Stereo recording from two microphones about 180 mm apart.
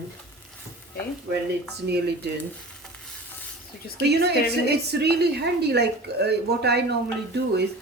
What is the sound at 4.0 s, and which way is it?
A woman's voice, 70° right (ahead or behind).